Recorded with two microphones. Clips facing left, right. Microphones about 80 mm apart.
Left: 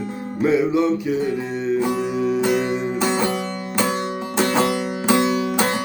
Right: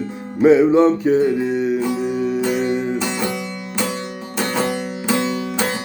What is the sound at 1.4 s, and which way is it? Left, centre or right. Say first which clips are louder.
Music: right 3 dB; centre.